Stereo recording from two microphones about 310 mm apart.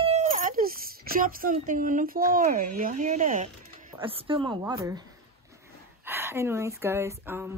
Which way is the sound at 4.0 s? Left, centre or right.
Centre.